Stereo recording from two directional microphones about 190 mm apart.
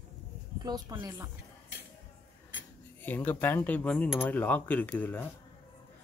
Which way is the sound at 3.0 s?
10° left (ahead or behind).